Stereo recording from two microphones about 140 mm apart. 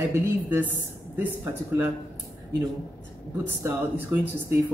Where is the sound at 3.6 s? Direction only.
15° right (ahead or behind).